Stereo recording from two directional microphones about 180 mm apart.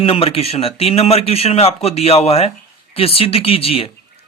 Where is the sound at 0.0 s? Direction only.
35° left (ahead or behind).